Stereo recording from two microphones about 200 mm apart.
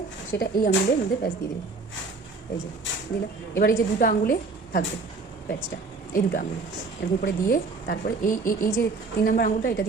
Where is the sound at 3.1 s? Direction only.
55° left (ahead or behind).